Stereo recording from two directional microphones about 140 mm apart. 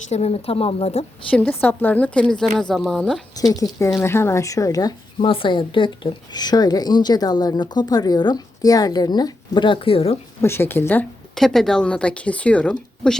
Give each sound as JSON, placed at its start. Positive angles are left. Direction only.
{"t": 0.1, "sound": "a woman's voice", "side_deg": 45}
{"t": 1.3, "sound": "speech", "side_deg": 10}
{"t": 3.3, "sound": "speech", "side_deg": 25}
{"t": 10.4, "sound": "speech", "side_deg": 15}
{"t": 11.3, "sound": "speech", "side_deg": 5}